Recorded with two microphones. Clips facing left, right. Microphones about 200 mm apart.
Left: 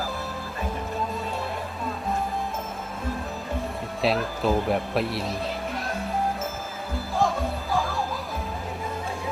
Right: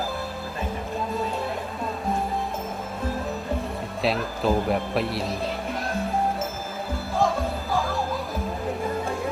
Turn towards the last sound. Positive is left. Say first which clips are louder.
# right 1 dB
turn(degrees=0)  # may be behind; listen again after turning